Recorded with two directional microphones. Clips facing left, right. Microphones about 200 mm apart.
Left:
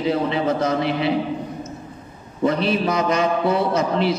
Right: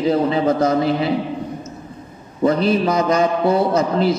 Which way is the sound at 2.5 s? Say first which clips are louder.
Right 3 dB; 40° right (ahead or behind).